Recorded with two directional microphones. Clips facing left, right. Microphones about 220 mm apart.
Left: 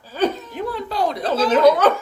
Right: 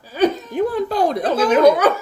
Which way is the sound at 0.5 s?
50° right (ahead or behind).